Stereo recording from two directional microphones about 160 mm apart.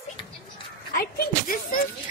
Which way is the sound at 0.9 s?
70° left (ahead or behind).